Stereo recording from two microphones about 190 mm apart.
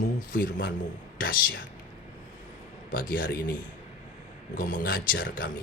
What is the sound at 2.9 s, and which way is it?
Speech, 50° left (ahead or behind).